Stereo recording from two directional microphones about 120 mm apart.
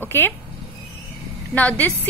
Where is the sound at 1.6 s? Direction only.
15° left (ahead or behind).